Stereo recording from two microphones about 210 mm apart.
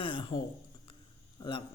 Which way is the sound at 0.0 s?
25° left (ahead or behind).